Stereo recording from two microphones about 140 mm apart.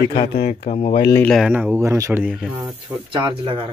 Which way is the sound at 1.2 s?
Centre (ahead or behind).